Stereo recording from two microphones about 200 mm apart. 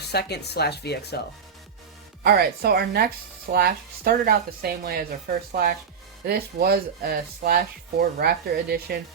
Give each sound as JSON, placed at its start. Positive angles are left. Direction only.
{"t": 0.0, "sound": "speech", "side_deg": 55}
{"t": 2.2, "sound": "speech", "side_deg": -50}